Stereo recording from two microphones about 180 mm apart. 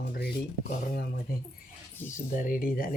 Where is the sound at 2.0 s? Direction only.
45° left (ahead or behind).